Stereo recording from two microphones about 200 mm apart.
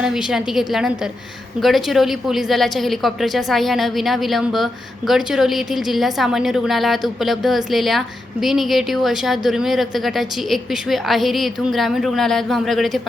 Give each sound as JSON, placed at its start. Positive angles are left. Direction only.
{"t": 0.0, "sound": "a woman's voice", "side_deg": -5}